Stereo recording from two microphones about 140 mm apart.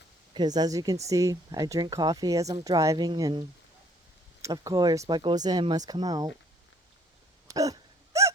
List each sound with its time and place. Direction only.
0.3 s speech: 30° right (ahead or behind)
4.4 s speech: 25° right (ahead or behind)
7.4 s a sound: 25° right (ahead or behind)